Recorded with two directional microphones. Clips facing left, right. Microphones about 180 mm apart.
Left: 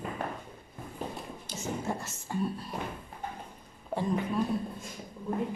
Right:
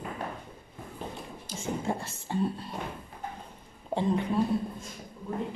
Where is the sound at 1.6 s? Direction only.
30° right (ahead or behind).